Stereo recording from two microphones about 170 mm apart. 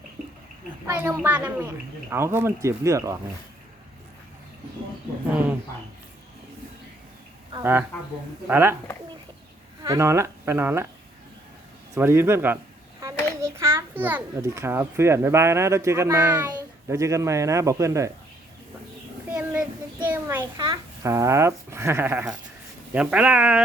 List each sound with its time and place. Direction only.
1.0 s speech: 10° right (ahead or behind)
7.5 s speech: 15° right (ahead or behind)
9.8 s speech: 20° right (ahead or behind)
11.9 s a child's voice: 15° right (ahead or behind)
19.3 s child singing: 10° right (ahead or behind)
20.0 s a child's voice: 10° right (ahead or behind)